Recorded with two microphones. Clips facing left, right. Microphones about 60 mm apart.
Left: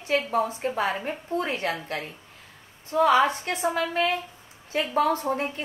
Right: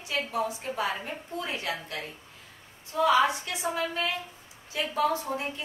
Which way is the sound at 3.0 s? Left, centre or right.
Left.